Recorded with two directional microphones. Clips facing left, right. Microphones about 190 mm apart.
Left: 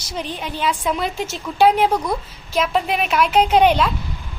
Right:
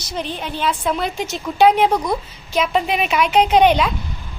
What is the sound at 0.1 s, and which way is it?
A woman's voice, 10° left (ahead or behind).